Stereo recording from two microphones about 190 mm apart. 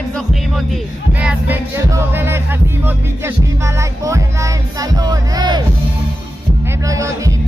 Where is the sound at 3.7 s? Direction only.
15° right (ahead or behind).